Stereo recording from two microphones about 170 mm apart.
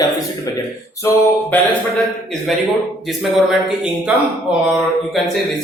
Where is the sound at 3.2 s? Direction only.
5° right (ahead or behind).